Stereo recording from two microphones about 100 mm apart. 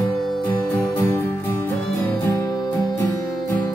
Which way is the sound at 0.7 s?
20° left (ahead or behind).